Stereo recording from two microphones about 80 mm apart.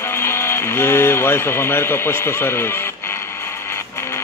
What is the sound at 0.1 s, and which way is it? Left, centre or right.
Speech, left.